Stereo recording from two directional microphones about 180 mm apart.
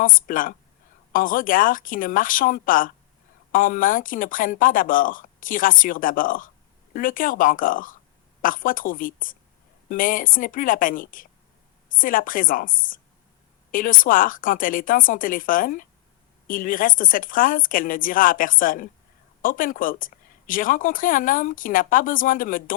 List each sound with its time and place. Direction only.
0.0 s speech: 50° left (ahead or behind)